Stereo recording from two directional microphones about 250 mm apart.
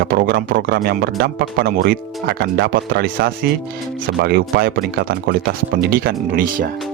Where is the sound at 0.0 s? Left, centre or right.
Right.